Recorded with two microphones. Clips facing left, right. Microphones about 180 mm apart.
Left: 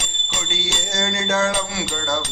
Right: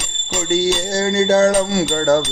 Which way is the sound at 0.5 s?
35° right (ahead or behind).